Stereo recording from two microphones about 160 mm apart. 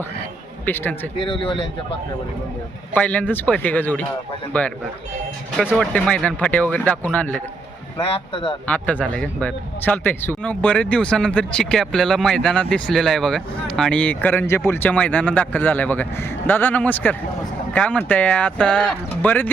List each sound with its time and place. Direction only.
0.6 s a man's voice: 10° left (ahead or behind)
1.2 s speech: 30° left (ahead or behind)
2.9 s a man's voice: 10° left (ahead or behind)
5.7 s a man's voice: 5° left (ahead or behind)
7.9 s speech: 35° left (ahead or behind)
8.6 s a man's voice: 10° left (ahead or behind)